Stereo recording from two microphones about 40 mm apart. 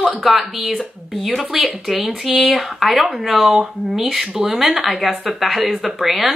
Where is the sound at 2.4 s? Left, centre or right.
Centre.